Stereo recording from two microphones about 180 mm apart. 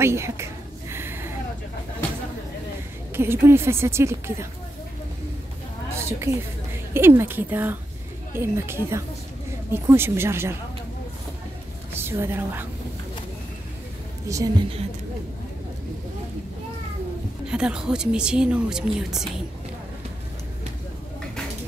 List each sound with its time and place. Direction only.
0.0 s a sound: 15° right (ahead or behind)
3.2 s a woman's voice: 15° right (ahead or behind)
5.9 s a woman's voice: 15° right (ahead or behind)
11.9 s a woman's voice: 15° right (ahead or behind)
14.2 s a woman's voice: 20° right (ahead or behind)
17.5 s speech: 5° right (ahead or behind)